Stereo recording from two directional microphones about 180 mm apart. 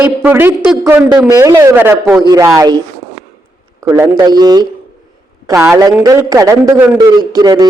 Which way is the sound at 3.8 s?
20° right (ahead or behind).